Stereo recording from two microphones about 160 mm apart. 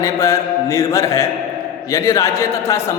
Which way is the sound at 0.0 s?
15° left (ahead or behind).